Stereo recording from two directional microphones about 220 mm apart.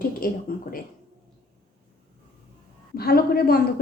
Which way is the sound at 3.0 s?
45° left (ahead or behind).